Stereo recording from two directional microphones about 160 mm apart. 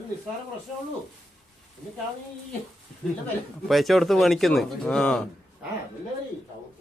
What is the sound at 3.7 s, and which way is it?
Speech, centre (ahead or behind).